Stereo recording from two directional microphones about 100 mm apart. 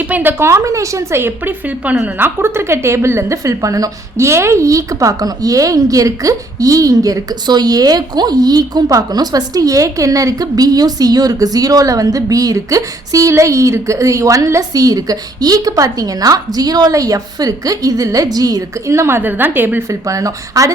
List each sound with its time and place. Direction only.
0.1 s speech: 20° right (ahead or behind)
19.9 s speech: 35° right (ahead or behind)